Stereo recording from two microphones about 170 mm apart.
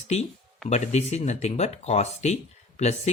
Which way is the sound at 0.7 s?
40° left (ahead or behind).